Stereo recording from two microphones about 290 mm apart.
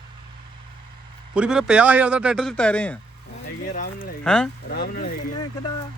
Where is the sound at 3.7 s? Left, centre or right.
Left.